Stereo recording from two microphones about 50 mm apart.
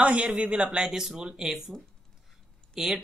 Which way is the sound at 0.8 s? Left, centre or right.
Centre.